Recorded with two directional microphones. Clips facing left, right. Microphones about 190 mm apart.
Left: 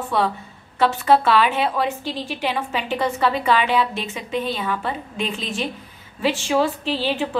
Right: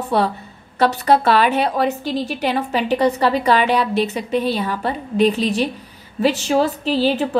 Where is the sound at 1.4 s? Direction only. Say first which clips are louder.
Right 3 dB; 45° right (ahead or behind).